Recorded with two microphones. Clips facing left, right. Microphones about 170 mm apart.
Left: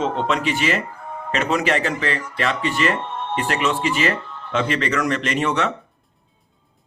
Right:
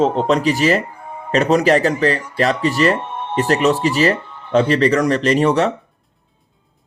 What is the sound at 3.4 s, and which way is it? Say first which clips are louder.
Speech: right 7 dB; 40° right (ahead or behind).